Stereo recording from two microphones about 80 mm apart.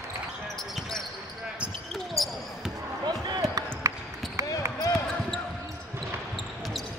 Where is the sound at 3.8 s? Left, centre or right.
Right.